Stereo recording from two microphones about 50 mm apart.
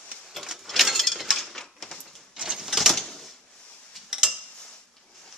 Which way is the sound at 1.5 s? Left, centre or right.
Centre.